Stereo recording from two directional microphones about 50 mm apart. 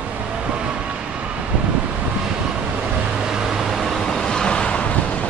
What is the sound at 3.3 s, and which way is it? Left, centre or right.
Vehicle, centre.